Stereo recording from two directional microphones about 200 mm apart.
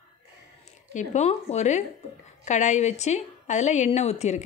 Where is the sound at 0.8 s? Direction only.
35° left (ahead or behind).